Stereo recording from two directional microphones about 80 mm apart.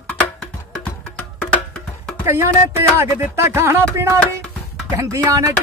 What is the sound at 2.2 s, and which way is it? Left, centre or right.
Speech, right.